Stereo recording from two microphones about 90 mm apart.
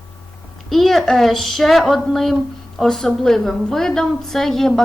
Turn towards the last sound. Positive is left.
turn(degrees=5)  # may be behind; listen again after turning